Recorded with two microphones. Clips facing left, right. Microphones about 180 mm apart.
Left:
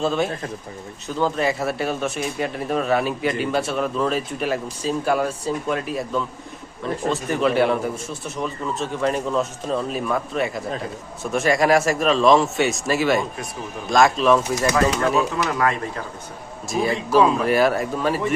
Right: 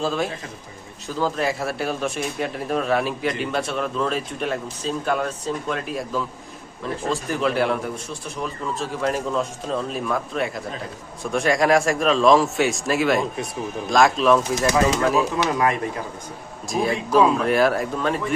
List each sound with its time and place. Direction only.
0.0 s speech: centre (ahead or behind)
15.4 s speech: 20° right (ahead or behind)
16.6 s speech: centre (ahead or behind)